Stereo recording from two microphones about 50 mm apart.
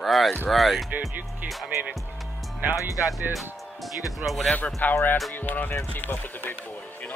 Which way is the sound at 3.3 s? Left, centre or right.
Centre.